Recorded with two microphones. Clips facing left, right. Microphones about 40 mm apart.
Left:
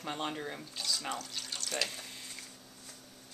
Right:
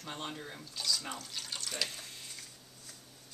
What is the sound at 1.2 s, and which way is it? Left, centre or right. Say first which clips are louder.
Water tap: left 1 dB; centre.